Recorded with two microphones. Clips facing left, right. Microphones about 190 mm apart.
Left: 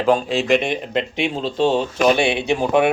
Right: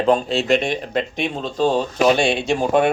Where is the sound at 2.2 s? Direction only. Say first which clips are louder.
Even; 60° left (ahead or behind).